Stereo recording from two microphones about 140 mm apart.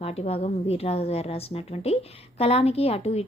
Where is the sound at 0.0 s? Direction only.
45° left (ahead or behind).